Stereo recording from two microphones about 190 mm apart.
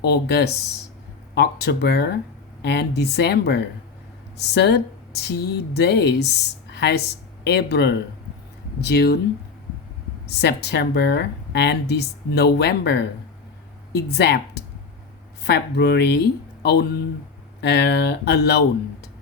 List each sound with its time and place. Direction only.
0.0 s speech: 60° left (ahead or behind)
10.2 s speech: 60° left (ahead or behind)